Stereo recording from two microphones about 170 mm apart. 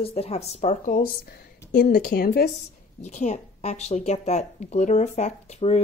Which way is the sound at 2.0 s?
65° left (ahead or behind).